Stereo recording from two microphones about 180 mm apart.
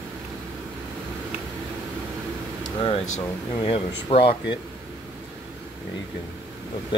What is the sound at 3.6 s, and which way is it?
Speech, 30° left (ahead or behind).